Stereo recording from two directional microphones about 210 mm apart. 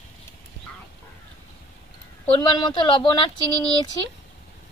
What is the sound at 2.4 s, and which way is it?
Speech, 20° left (ahead or behind).